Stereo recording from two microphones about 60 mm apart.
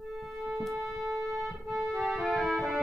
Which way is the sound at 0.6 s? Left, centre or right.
Centre.